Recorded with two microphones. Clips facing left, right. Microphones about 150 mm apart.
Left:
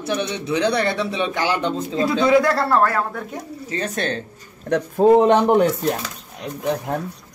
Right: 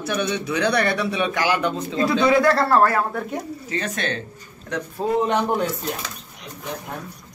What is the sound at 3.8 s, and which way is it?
Speech, 35° left (ahead or behind).